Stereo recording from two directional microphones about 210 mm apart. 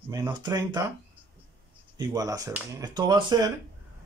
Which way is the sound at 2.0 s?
15° right (ahead or behind).